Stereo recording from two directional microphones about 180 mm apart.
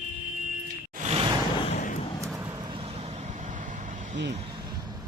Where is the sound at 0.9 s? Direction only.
40° right (ahead or behind).